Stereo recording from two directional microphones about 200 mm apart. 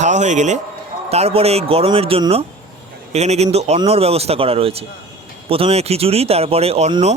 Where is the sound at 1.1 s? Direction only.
30° right (ahead or behind).